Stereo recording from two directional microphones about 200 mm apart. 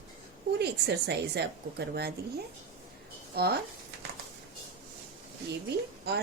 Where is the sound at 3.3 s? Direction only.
50° right (ahead or behind).